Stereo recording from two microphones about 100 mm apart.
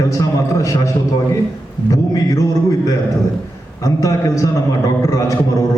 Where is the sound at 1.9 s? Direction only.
35° left (ahead or behind).